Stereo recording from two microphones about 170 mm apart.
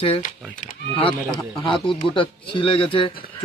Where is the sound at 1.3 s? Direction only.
30° left (ahead or behind).